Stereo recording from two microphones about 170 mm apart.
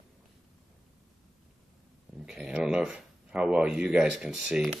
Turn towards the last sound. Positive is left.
turn(degrees=0)  # may be behind; listen again after turning